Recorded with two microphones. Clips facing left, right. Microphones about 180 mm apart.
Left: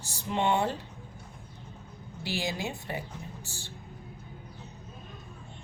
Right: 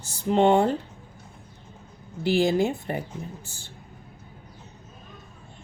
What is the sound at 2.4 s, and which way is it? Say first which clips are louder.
Speech: right 12 dB; 55° right (ahead or behind).